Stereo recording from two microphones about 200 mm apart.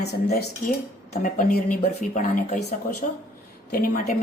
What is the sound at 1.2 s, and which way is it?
A man's voice, 40° left (ahead or behind).